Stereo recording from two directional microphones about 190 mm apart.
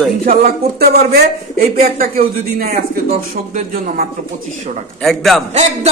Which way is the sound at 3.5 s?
45° right (ahead or behind).